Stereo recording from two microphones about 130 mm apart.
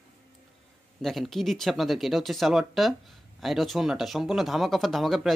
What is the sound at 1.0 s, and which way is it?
Speech, centre (ahead or behind).